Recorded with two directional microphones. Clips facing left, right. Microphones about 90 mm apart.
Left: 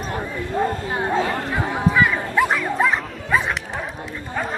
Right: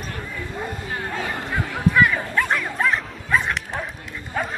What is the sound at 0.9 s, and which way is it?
Chatter, 25° left (ahead or behind).